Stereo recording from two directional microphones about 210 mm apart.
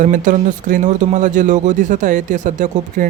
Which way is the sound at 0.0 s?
40° right (ahead or behind).